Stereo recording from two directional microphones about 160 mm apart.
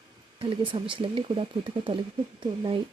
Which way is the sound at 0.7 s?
30° right (ahead or behind).